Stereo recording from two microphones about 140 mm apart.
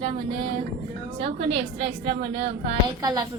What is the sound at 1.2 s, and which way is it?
A woman's voice, 45° right (ahead or behind).